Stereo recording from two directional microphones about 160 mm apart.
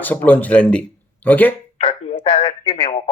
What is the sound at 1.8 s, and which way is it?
Telephone, 35° left (ahead or behind).